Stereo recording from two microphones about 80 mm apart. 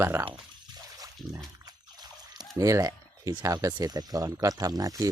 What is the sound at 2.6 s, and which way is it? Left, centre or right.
Speech, right.